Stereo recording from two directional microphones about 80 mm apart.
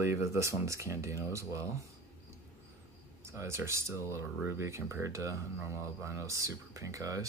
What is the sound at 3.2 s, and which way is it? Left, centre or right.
Speech, right.